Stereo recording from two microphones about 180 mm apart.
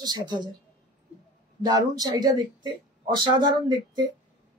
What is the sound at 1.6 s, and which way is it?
Speech, 20° right (ahead or behind).